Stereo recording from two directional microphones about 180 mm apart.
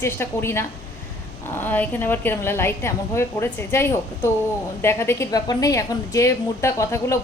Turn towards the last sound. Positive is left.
turn(degrees=15)  # may be behind; listen again after turning